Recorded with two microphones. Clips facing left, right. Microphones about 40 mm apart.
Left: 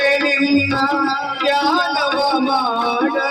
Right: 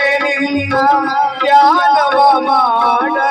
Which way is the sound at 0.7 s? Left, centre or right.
Right.